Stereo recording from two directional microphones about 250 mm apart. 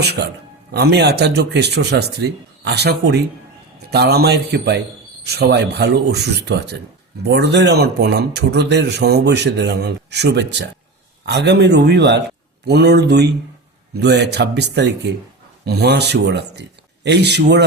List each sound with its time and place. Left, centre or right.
0.0 s speech: right